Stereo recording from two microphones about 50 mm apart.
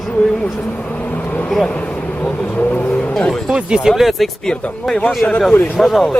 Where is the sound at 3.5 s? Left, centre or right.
Centre.